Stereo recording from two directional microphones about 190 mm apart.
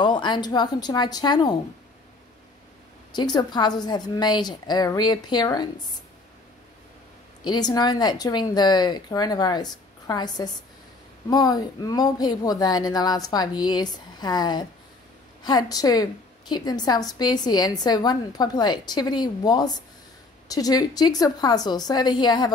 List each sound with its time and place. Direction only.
0.0 s a woman's voice: 25° left (ahead or behind)
3.3 s a woman's voice: 20° left (ahead or behind)
7.4 s a woman's voice: 20° left (ahead or behind)